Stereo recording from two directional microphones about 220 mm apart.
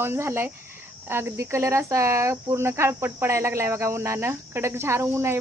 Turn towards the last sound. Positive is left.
turn(degrees=-10)  # may be behind; listen again after turning